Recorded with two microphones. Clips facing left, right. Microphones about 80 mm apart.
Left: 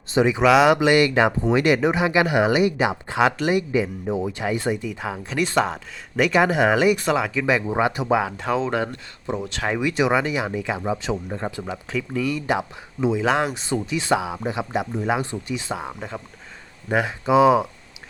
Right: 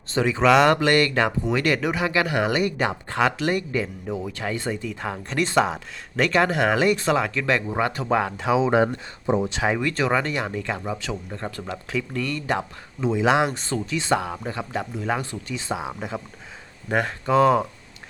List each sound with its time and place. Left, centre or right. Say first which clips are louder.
0.1 s speech: left 2 dB; centre
8.2 s speech: right 2 dB; centre
8.7 s speech: right 5 dB; right
9.6 s speech: left 4 dB; centre
10.8 s speech: left 4 dB; left
11.6 s speech: left 1 dB; centre
13.5 s speech: left 2 dB; centre
14.4 s speech: left 4 dB; centre
15.7 s speech: right 1 dB; centre